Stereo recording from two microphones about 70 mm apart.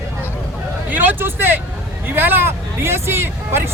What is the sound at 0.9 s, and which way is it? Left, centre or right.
Speech, right.